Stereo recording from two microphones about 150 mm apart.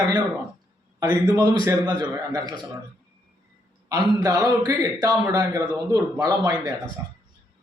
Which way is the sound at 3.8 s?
20° right (ahead or behind).